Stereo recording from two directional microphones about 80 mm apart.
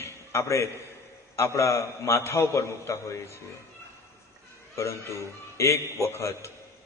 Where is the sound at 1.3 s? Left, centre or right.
Left.